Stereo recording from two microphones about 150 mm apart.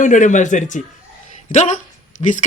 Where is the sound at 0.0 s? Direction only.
55° left (ahead or behind).